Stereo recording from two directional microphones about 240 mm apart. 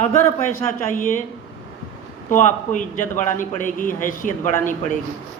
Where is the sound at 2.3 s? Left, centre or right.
Left.